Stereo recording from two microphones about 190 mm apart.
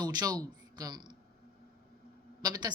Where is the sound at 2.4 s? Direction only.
20° right (ahead or behind).